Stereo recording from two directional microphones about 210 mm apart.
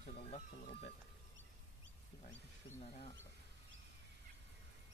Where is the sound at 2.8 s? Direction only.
30° left (ahead or behind).